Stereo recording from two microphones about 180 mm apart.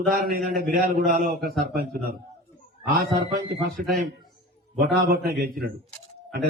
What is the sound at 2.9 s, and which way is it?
A man's voice, 60° right (ahead or behind).